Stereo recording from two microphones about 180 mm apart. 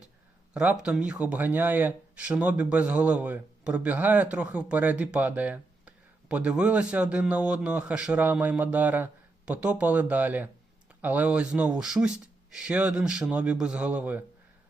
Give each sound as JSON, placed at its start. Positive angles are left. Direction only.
{"t": 0.5, "sound": "speech", "side_deg": -5}